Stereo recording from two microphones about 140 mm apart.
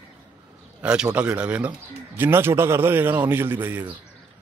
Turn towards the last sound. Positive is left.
turn(degrees=-15)  # may be behind; listen again after turning